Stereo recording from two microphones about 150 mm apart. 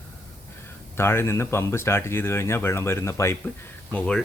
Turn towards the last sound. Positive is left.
turn(degrees=10)  # may be behind; listen again after turning